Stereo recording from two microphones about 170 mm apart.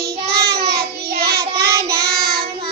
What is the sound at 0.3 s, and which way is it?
Child singing, 70° right (ahead or behind).